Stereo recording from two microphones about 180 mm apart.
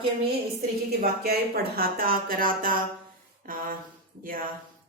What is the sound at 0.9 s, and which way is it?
Speech, 60° right (ahead or behind).